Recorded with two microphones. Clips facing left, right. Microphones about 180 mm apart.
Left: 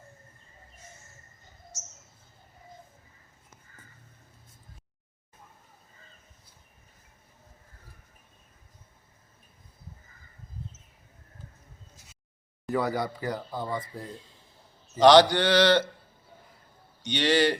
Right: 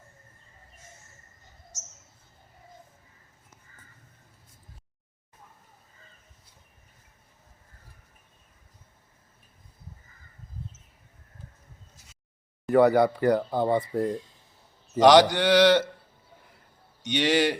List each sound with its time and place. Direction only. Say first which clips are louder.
12.7 s speech: right 9 dB; 60° right (ahead or behind)
14.9 s speech: even; 15° right (ahead or behind)
17.2 s speech: even; 10° right (ahead or behind)